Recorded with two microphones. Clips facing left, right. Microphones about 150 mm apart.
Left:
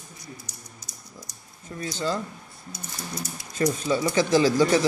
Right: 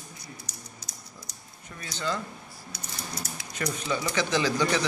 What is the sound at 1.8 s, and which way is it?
Speech, 35° left (ahead or behind).